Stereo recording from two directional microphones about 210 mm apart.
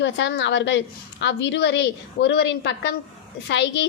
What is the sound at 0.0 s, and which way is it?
A woman's voice, 55° left (ahead or behind).